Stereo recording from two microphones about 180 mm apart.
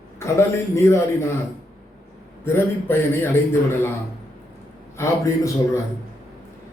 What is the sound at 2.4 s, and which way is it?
Speech, 15° left (ahead or behind).